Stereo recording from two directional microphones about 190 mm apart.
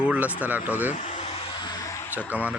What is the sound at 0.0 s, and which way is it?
Speech, 5° right (ahead or behind).